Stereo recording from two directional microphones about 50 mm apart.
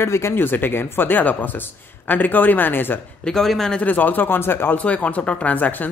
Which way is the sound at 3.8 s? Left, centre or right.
Left.